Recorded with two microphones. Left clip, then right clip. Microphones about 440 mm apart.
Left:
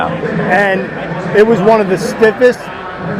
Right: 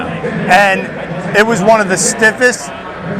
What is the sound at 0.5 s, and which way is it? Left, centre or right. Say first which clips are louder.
A man's voice: right 4 dB; right.